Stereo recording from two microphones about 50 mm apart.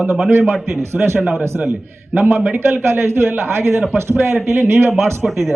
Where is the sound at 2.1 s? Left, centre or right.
Right.